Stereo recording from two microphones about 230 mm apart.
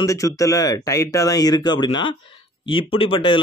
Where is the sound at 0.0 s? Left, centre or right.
Centre.